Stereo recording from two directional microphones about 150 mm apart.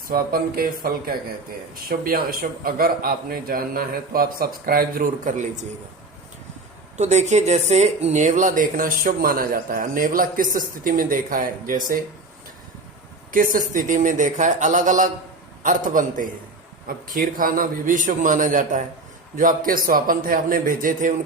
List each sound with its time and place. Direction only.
0.1 s a man's voice: 80° right
6.9 s speech: 50° right (ahead or behind); by 11.9 s 65° right (ahead or behind)
13.3 s speech: 65° right (ahead or behind)
16.8 s a man's voice: 75° right (ahead or behind)